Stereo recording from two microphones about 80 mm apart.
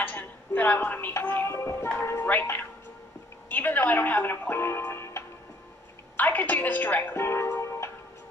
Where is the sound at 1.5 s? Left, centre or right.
Left.